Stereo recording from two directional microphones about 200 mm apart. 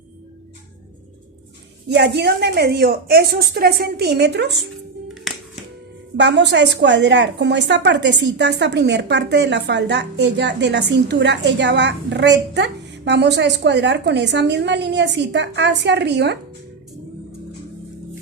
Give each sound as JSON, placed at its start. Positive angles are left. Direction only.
{"t": 1.9, "sound": "a woman's voice", "side_deg": -55}
{"t": 5.3, "sound": "music", "side_deg": 0}
{"t": 6.1, "sound": "a woman's voice", "side_deg": -60}